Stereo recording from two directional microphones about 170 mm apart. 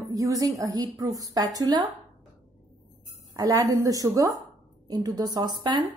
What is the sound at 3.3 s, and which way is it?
A woman's voice, 20° right (ahead or behind).